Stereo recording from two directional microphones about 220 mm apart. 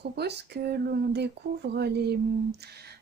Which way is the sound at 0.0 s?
50° right (ahead or behind).